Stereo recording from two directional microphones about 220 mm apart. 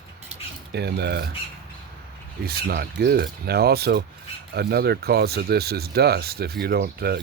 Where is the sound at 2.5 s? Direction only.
45° right (ahead or behind).